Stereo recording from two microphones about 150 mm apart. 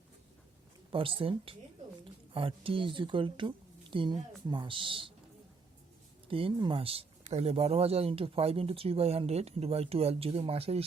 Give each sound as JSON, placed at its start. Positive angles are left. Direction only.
{"t": 0.9, "sound": "speech", "side_deg": -35}
{"t": 6.2, "sound": "speech", "side_deg": -35}